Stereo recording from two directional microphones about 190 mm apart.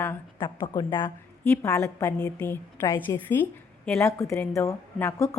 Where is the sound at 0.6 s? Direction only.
25° left (ahead or behind).